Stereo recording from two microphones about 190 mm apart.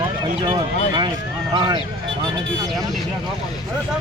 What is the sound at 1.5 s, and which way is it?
Speech, 25° right (ahead or behind).